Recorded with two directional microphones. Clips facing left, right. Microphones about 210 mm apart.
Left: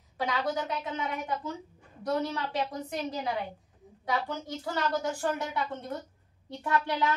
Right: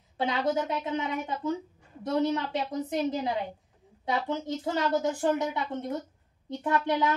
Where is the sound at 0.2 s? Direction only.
25° right (ahead or behind).